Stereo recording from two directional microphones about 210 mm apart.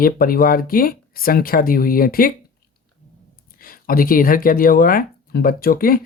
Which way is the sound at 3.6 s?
45° left (ahead or behind).